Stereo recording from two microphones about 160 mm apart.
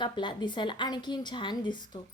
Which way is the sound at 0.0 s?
30° left (ahead or behind).